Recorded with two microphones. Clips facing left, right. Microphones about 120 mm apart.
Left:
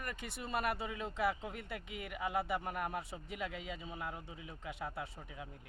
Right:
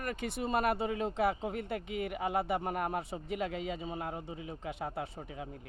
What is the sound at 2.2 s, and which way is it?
Speech, 45° right (ahead or behind).